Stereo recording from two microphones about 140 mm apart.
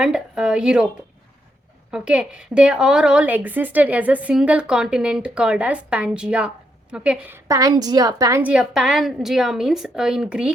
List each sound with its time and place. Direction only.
0.0 s a woman's voice: 5° right (ahead or behind)
1.9 s a woman's voice: 5° right (ahead or behind); by 8.4 s 30° right (ahead or behind)
8.4 s a woman's voice: 10° right (ahead or behind)